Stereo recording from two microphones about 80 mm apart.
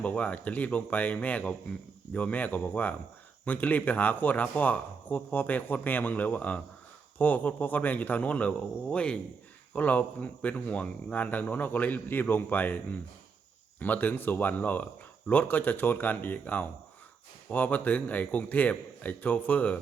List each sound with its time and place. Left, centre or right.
0.0 s speech: centre